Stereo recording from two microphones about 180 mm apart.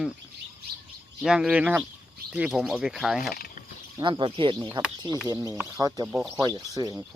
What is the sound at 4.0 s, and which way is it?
Speech, 25° right (ahead or behind).